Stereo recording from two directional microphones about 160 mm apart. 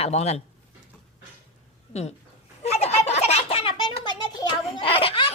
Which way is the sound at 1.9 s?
45° left (ahead or behind).